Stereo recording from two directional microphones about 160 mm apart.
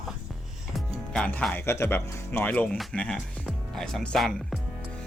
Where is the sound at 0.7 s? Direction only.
5° left (ahead or behind).